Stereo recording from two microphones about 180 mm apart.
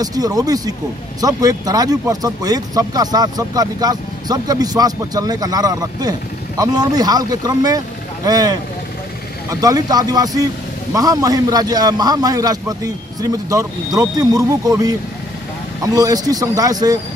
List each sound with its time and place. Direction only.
0.0 s speech: 20° right (ahead or behind)